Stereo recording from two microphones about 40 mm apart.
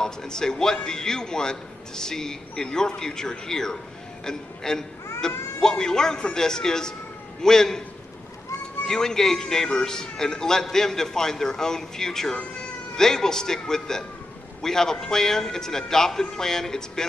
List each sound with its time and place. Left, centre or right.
0.0 s a man's voice: centre
8.8 s a man's voice: centre